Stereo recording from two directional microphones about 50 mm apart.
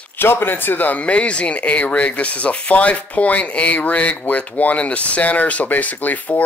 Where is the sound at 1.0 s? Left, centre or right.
Left.